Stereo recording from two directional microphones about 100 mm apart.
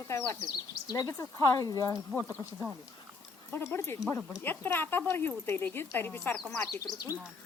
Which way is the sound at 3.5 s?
25° left (ahead or behind).